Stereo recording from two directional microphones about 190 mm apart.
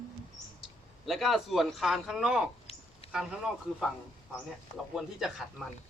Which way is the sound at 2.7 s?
30° left (ahead or behind).